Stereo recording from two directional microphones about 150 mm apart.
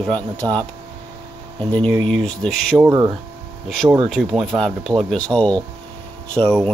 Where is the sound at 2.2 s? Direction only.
5° left (ahead or behind).